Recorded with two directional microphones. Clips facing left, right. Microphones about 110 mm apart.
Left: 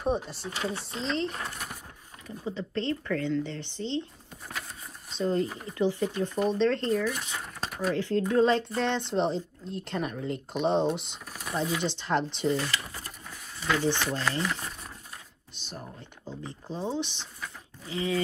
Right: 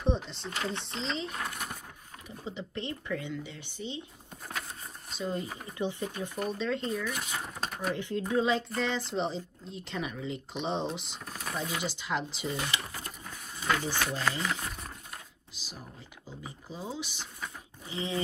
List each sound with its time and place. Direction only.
0.0 s speech: 5° left (ahead or behind)
2.2 s speech: 15° right (ahead or behind)
5.1 s speech: 10° right (ahead or behind)
12.5 s speech: 20° right (ahead or behind)
13.8 s speech: 10° right (ahead or behind)
16.6 s speech: 30° left (ahead or behind)
16.9 s speech: 10° right (ahead or behind)
17.8 s livestock: 20° right (ahead or behind)